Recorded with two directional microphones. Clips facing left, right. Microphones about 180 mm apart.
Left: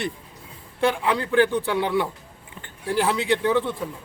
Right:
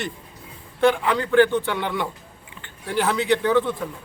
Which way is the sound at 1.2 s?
35° left (ahead or behind).